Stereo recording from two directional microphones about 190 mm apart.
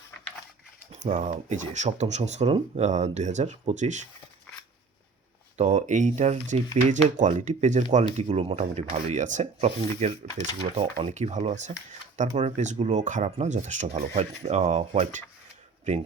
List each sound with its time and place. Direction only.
0.9 s speech: 40° right (ahead or behind)
5.5 s speech: 40° right (ahead or behind)